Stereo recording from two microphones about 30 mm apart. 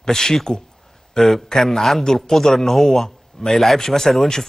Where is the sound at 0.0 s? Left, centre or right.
Centre.